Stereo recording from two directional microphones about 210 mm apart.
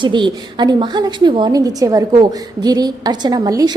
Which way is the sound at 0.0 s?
20° right (ahead or behind).